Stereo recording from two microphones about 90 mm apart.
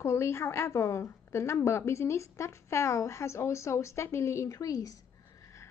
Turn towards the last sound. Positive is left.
turn(degrees=40)  # may be behind; listen again after turning